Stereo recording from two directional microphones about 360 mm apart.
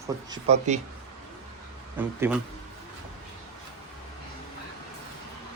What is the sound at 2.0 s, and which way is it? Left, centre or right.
Speech, centre.